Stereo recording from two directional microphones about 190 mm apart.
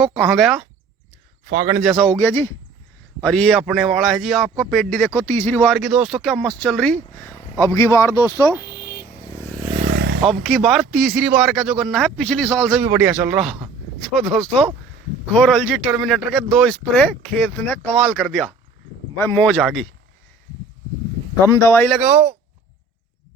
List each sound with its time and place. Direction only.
0.2 s speech: centre (ahead or behind)
1.5 s a man's voice: 20° right (ahead or behind)
1.7 s speech: centre (ahead or behind)
2.1 s speech: 15° left (ahead or behind)
3.2 s speech: 5° left (ahead or behind)
5.7 s speech: centre (ahead or behind); by 8.1 s 15° left (ahead or behind)
9.0 s vehicle: 25° left (ahead or behind)
9.9 s a sound: 70° right (ahead or behind)
10.2 s speech: centre (ahead or behind)
12.9 s speech: 10° right (ahead or behind)
21.4 s speech: 15° left (ahead or behind)
21.8 s speech: 5° right (ahead or behind)